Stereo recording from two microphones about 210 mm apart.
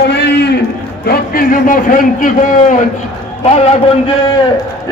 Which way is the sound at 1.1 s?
45° left (ahead or behind).